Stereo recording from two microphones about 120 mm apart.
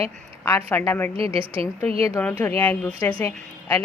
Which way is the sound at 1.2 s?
50° right (ahead or behind).